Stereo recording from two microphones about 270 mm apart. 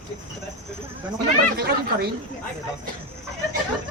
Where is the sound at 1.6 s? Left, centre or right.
Right.